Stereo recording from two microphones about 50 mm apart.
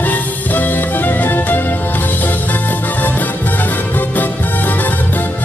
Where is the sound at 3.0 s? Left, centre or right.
Left.